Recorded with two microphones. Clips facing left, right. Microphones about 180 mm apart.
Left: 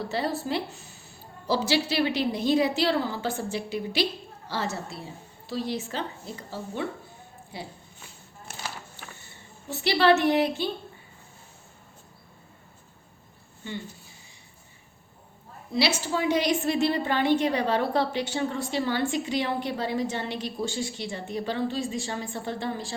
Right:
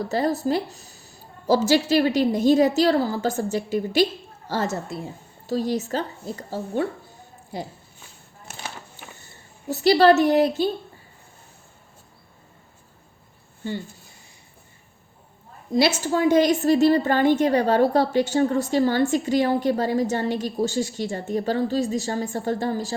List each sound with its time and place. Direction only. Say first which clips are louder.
0.1 s a woman's voice: right 7 dB; 40° right (ahead or behind)
9.6 s a woman's voice: right 6 dB; 40° right (ahead or behind)
16.0 s a woman's voice: right 7 dB; 45° right (ahead or behind)